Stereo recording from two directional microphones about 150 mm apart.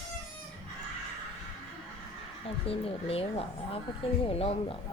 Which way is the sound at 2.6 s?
40° left (ahead or behind).